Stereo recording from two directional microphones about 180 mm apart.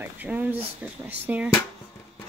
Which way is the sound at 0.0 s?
10° right (ahead or behind).